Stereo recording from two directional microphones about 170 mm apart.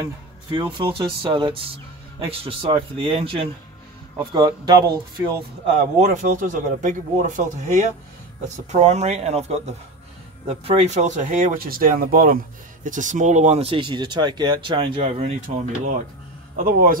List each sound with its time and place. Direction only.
0.0 s speech: 25° right (ahead or behind)
5.9 s speech: 45° right (ahead or behind)
16.5 s speech: 55° right (ahead or behind)